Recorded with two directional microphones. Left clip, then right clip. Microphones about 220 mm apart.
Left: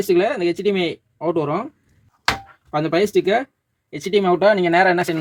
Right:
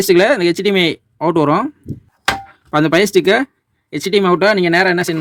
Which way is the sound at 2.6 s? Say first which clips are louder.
Right 6 dB; 40° right (ahead or behind).